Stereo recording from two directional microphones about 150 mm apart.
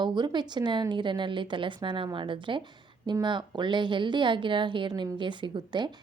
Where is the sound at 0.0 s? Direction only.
30° right (ahead or behind).